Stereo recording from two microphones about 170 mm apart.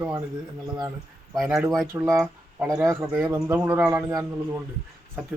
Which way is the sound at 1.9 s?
15° right (ahead or behind).